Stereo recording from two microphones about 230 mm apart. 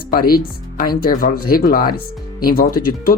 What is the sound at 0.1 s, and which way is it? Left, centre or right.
Speech, left.